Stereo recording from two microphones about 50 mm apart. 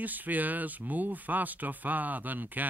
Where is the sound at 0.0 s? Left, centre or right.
Right.